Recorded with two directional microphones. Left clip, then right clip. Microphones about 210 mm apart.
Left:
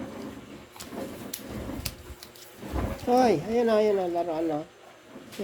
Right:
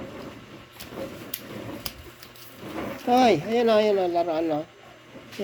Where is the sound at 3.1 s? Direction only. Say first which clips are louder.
Right 3 dB; 15° right (ahead or behind).